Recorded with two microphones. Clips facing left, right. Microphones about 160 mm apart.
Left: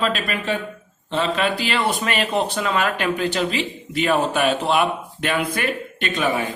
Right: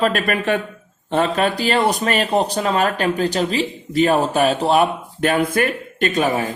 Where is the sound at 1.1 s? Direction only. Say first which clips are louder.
Right 3 dB; 45° right (ahead or behind).